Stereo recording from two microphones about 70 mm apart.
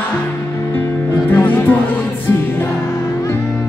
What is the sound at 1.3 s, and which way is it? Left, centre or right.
Music, left.